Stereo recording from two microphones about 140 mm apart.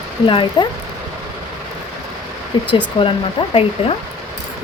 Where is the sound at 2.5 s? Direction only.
35° left (ahead or behind).